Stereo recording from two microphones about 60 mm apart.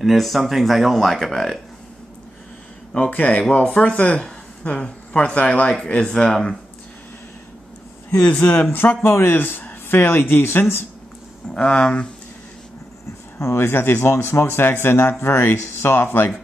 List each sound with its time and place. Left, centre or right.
0.0 s speech: centre
2.9 s speech: left
3.5 s speech: centre
8.2 s speech: left
11.5 s speech: centre
13.4 s speech: left